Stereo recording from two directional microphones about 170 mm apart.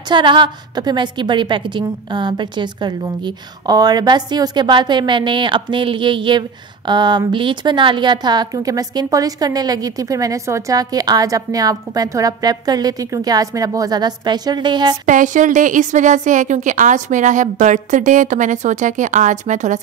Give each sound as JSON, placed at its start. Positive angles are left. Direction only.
{"t": 0.1, "sound": "a woman's voice", "side_deg": -30}
{"t": 15.0, "sound": "a woman's voice", "side_deg": -50}